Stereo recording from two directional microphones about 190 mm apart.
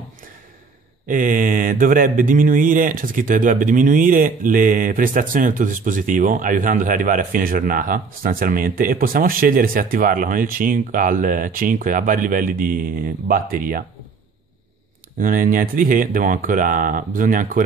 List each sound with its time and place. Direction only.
1.0 s mantra: 45° right (ahead or behind)
15.1 s mantra: 45° right (ahead or behind)